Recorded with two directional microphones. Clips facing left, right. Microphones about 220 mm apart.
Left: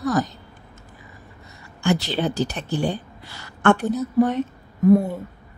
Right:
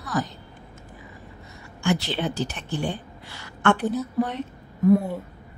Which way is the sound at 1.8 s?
40° left (ahead or behind).